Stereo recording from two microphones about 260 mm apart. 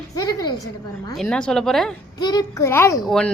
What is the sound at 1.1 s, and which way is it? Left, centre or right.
Speech, centre.